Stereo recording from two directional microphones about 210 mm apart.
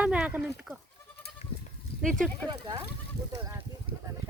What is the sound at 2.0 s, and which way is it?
Speech, centre (ahead or behind).